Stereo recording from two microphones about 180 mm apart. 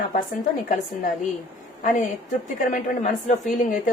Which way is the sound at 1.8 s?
45° left (ahead or behind).